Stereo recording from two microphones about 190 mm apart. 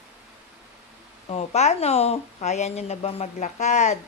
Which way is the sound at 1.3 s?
35° left (ahead or behind).